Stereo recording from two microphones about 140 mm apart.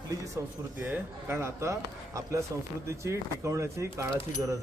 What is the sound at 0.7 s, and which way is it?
Speech, 15° right (ahead or behind).